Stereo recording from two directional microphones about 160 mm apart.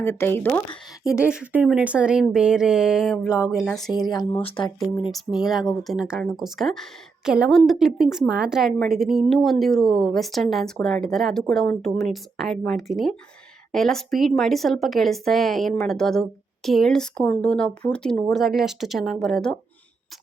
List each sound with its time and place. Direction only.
0.0 s speech: 15° left (ahead or behind)
1.3 s speech: 5° right (ahead or behind)
3.9 s speech: 25° left (ahead or behind)
5.1 s speech: centre (ahead or behind)